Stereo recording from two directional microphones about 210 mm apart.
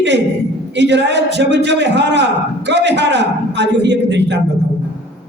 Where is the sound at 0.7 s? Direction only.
55° right (ahead or behind).